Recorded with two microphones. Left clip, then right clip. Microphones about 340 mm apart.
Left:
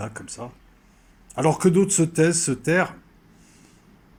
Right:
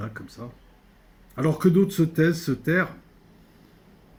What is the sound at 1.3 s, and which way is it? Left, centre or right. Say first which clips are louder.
Speech: left 3 dB; left.